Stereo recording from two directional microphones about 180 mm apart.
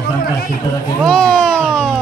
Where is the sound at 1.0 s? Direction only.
5° left (ahead or behind).